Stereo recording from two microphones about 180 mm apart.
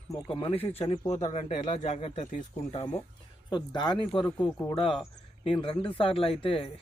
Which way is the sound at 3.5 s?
25° left (ahead or behind).